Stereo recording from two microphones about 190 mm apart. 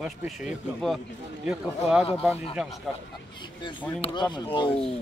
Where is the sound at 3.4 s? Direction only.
25° left (ahead or behind).